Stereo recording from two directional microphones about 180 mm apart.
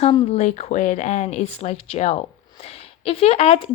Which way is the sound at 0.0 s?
35° left (ahead or behind).